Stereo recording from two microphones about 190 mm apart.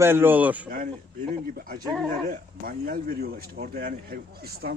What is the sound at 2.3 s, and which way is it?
Speech, 50° right (ahead or behind).